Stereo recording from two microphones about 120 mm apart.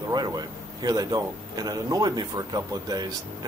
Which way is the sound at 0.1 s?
35° right (ahead or behind).